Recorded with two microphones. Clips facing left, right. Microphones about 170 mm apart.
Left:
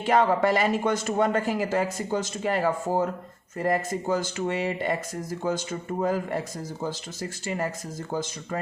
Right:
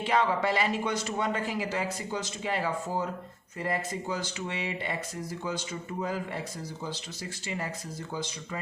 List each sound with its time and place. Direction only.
0.0 s speech: 45° left (ahead or behind)